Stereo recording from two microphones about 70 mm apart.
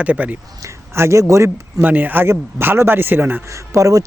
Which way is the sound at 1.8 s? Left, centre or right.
Right.